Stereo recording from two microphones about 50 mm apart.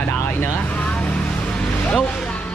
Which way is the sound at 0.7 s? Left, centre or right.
Left.